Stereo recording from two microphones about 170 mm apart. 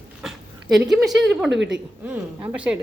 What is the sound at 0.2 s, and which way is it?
Dog, centre (ahead or behind).